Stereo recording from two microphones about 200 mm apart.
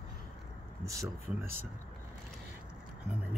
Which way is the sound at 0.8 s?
15° right (ahead or behind).